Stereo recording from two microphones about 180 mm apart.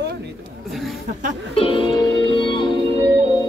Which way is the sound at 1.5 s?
30° left (ahead or behind).